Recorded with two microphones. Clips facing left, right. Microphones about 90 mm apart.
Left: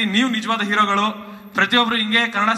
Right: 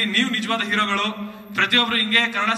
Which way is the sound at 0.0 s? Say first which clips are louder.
Left 4 dB; 25° left (ahead or behind).